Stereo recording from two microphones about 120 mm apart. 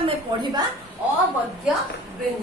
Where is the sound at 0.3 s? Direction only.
35° right (ahead or behind).